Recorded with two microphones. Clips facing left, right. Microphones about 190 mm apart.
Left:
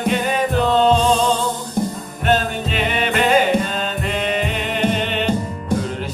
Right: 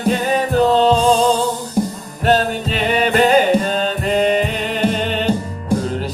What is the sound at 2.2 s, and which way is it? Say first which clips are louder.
Music: right 3 dB; 40° right (ahead or behind).